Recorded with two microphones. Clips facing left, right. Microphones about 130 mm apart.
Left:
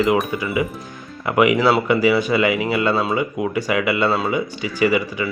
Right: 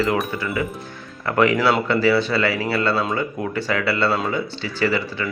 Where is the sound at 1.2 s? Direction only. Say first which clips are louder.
Left 2 dB; 10° left (ahead or behind).